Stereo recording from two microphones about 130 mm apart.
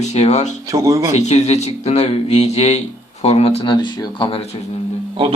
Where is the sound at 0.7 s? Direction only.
25° right (ahead or behind).